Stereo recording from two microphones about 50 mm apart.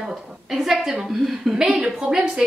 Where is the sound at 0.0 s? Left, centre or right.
Centre.